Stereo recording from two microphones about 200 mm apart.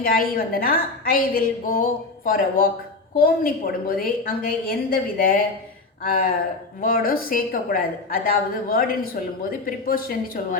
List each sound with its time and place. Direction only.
0.0 s a woman's voice: 45° left (ahead or behind)